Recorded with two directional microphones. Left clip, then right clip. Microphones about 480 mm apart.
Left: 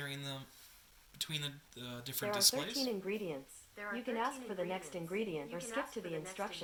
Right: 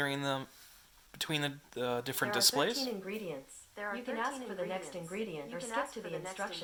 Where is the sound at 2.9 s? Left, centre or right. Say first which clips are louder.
Even; centre.